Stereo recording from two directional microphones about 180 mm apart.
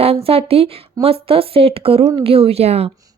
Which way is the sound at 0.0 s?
35° right (ahead or behind).